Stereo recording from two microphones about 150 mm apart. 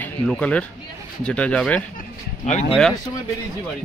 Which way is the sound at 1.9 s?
50° left (ahead or behind).